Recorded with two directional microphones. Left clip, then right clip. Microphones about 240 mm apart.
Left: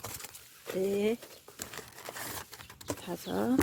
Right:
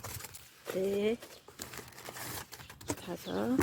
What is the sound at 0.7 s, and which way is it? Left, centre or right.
Patter, centre.